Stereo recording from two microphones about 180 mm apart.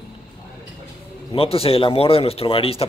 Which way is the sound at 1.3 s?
30° left (ahead or behind).